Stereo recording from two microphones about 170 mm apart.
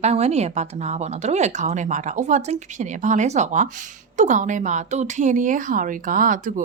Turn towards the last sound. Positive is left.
turn(degrees=-50)  # may be behind; listen again after turning